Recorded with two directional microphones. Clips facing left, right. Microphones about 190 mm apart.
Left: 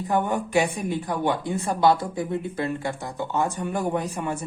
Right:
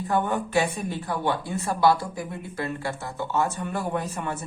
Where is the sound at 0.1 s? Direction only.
15° left (ahead or behind).